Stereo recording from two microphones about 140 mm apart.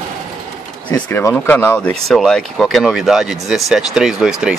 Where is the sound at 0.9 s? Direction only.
15° left (ahead or behind).